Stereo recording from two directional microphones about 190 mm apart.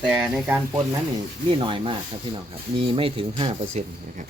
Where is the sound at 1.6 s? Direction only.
25° right (ahead or behind).